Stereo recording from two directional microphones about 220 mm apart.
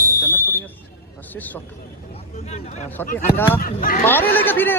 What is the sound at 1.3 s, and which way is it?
Speech, 10° left (ahead or behind).